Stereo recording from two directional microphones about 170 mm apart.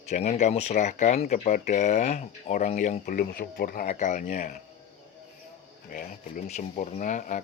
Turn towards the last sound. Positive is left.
turn(degrees=45)  # may be behind; listen again after turning